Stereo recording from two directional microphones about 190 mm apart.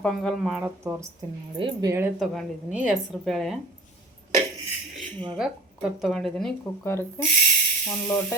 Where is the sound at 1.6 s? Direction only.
20° right (ahead or behind).